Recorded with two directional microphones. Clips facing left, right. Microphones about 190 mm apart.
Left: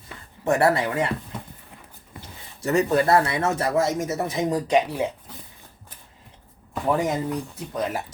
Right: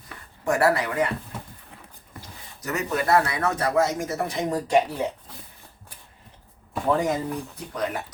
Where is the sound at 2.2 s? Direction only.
30° left (ahead or behind).